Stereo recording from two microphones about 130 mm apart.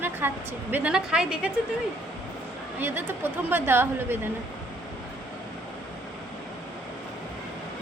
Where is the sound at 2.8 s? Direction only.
15° right (ahead or behind).